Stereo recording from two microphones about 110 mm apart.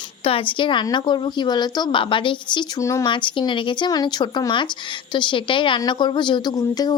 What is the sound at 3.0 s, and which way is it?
A woman's voice, 45° left (ahead or behind).